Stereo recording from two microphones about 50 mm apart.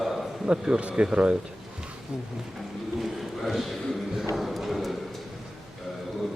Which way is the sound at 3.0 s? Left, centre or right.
Centre.